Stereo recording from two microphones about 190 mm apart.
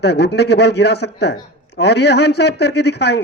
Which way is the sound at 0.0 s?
60° left (ahead or behind).